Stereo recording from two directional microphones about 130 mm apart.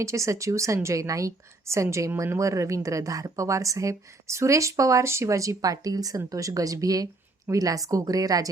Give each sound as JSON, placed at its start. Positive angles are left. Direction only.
{"t": 0.0, "sound": "a woman's voice", "side_deg": -25}